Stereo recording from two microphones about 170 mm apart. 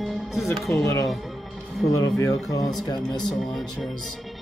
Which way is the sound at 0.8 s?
20° left (ahead or behind).